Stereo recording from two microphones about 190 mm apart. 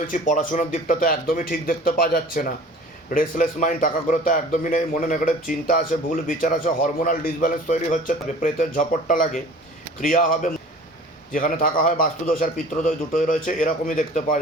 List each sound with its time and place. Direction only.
0.1 s a man's voice: 45° left (ahead or behind)